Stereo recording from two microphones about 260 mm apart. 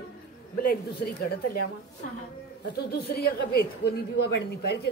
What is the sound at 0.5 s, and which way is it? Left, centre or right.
A woman's voice, left.